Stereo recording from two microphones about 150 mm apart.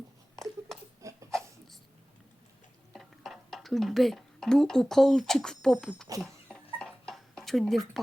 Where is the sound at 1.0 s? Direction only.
20° right (ahead or behind).